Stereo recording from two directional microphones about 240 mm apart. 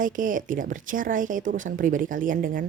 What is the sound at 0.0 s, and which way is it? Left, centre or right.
A woman's voice, right.